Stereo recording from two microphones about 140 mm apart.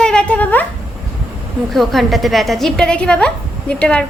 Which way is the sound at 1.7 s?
Centre (ahead or behind).